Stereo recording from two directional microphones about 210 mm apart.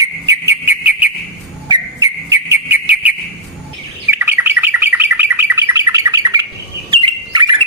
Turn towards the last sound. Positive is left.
turn(degrees=-20)  # may be behind; listen again after turning